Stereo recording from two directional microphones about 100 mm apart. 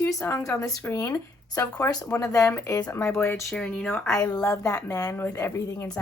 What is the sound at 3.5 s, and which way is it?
Speech, 10° left (ahead or behind).